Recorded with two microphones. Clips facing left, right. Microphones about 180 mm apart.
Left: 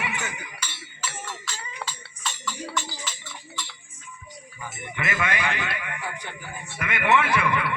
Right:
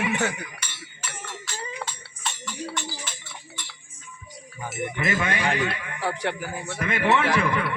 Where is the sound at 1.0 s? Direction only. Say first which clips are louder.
Left 3 dB; 60° right (ahead or behind).